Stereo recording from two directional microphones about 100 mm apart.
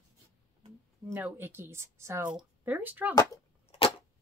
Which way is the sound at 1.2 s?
20° right (ahead or behind).